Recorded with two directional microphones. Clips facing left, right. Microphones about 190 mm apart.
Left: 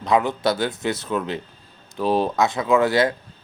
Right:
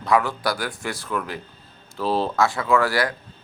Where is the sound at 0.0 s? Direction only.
20° left (ahead or behind).